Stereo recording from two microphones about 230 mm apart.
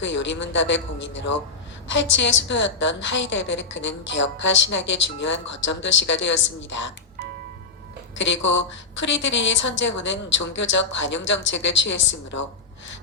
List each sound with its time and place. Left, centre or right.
0.0 s a woman's voice: left
8.2 s a woman's voice: left